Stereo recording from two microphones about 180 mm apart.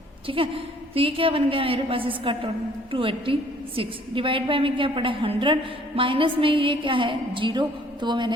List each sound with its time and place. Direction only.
0.3 s a woman's voice: 30° right (ahead or behind)